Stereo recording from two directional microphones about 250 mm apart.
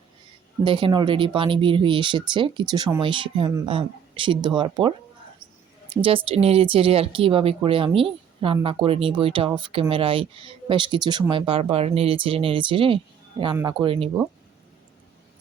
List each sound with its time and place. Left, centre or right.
0.6 s speech: centre